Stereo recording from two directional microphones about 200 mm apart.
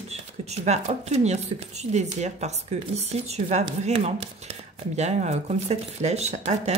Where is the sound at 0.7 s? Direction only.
35° right (ahead or behind).